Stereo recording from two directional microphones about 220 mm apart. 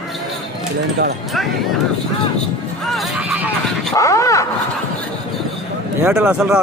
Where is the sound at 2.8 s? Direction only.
Centre (ahead or behind).